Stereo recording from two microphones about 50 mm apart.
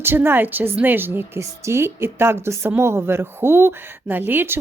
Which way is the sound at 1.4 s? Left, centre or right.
Right.